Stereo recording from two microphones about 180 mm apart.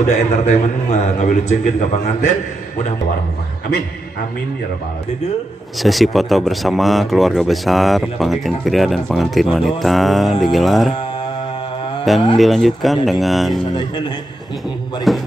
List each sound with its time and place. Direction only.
0.0 s a man's voice: 40° left (ahead or behind)
5.8 s speech: centre (ahead or behind)
12.4 s speech: centre (ahead or behind)
13.7 s a man's voice: 25° left (ahead or behind)
15.1 s speech: centre (ahead or behind)